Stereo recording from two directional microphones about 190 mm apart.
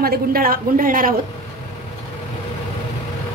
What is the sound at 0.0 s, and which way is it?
A woman's voice, 50° right (ahead or behind).